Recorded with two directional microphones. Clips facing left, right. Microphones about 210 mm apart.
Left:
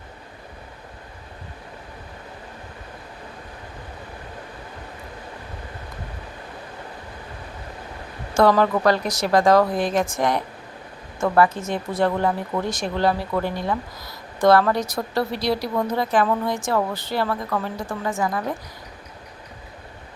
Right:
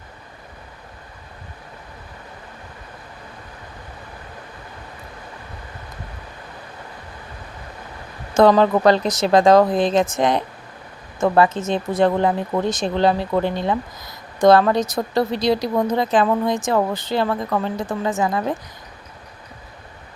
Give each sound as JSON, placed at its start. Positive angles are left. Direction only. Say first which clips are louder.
{"t": 8.4, "sound": "speech", "louder": "right 4 dB", "side_deg": -20}